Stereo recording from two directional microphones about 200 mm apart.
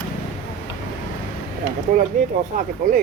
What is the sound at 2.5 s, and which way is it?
Speech, 40° right (ahead or behind).